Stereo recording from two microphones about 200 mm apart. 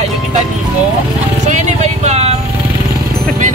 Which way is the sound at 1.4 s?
35° right (ahead or behind).